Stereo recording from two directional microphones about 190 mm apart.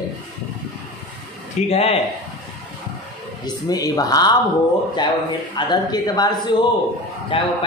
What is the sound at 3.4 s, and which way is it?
Speech, 20° left (ahead or behind).